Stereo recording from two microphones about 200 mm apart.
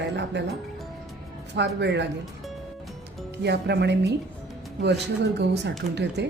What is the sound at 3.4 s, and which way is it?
Speech, 55° right (ahead or behind).